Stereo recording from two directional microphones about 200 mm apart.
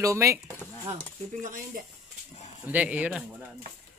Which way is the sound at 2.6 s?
5° right (ahead or behind).